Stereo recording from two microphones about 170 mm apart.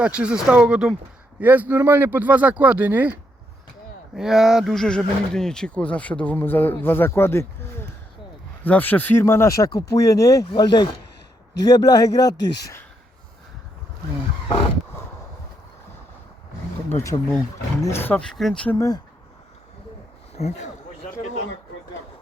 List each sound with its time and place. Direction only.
0.0 s speech: 5° right (ahead or behind); by 12.8 s 20° left (ahead or behind)
16.9 s speech: 15° left (ahead or behind)
18.7 s speech: 20° left (ahead or behind)
20.3 s speech: 40° left (ahead or behind)